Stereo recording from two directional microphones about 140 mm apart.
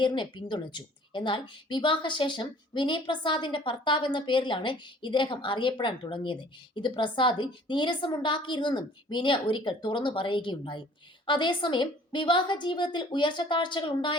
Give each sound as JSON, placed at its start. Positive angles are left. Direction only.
{"t": 0.0, "sound": "a woman's voice", "side_deg": 35}